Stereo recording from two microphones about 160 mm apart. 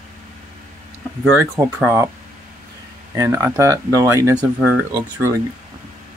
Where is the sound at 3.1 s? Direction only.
20° right (ahead or behind).